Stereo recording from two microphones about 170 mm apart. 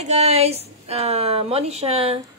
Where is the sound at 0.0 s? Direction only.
40° right (ahead or behind).